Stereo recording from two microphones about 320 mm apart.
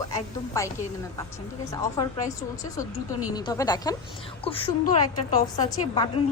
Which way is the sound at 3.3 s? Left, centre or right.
Centre.